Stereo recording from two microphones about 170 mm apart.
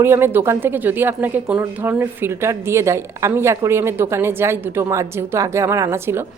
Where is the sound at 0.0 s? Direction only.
15° right (ahead or behind).